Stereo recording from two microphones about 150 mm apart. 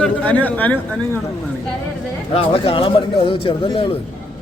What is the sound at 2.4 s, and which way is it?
Speech, 40° left (ahead or behind).